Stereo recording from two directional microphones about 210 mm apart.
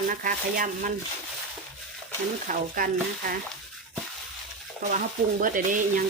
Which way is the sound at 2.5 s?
40° right (ahead or behind).